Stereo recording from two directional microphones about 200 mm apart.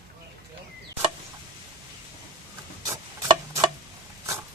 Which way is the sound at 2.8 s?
15° right (ahead or behind).